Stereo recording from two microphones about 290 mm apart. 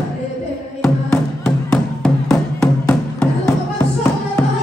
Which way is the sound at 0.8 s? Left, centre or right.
Centre.